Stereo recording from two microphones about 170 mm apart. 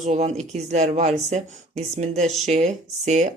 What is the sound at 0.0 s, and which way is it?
Speech, 40° right (ahead or behind).